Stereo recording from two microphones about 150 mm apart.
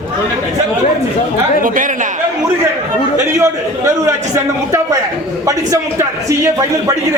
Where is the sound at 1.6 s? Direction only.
65° right (ahead or behind).